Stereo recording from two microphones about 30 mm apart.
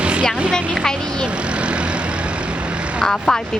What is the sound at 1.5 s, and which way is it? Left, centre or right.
Vehicle, right.